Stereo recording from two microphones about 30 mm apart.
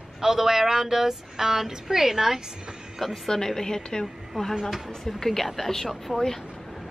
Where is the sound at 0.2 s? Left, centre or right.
Centre.